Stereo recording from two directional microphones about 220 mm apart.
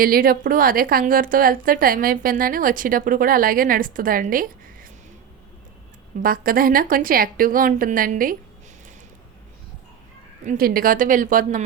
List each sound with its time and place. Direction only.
0.0 s a woman's voice: 40° right (ahead or behind)
6.2 s a woman's voice: 40° right (ahead or behind)
10.4 s a woman's voice: 40° right (ahead or behind)